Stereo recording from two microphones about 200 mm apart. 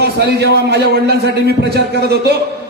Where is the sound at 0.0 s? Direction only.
55° right (ahead or behind).